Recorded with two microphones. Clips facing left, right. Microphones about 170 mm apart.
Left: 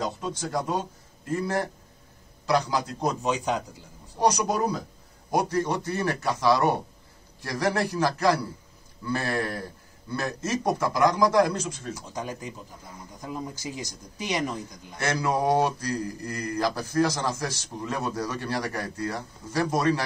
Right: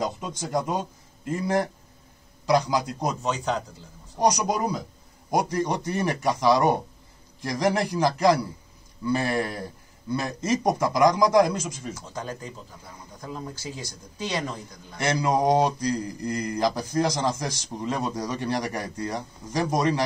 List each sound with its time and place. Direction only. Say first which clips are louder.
0.4 s mantra: right 2 dB; 15° right (ahead or behind)
2.4 s mantra: right 2 dB; 15° right (ahead or behind)
3.2 s speech: even; 15° left (ahead or behind)
4.2 s mantra: right 1 dB; 15° right (ahead or behind)
12.1 s speech: even; 15° left (ahead or behind)
15.0 s mantra: right 2 dB; 15° right (ahead or behind)